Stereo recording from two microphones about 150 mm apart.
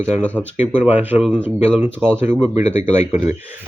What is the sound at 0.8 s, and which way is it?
Speech, 10° right (ahead or behind).